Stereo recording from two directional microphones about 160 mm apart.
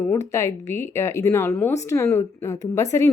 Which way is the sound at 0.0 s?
20° left (ahead or behind).